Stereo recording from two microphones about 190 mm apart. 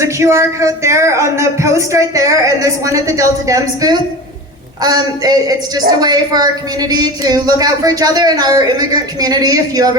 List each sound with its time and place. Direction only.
0.0 s a woman's voice: 15° right (ahead or behind)